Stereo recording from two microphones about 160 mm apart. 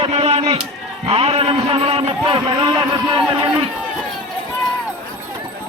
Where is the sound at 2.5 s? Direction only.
25° right (ahead or behind).